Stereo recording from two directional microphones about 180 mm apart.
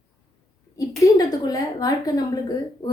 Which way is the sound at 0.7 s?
20° left (ahead or behind).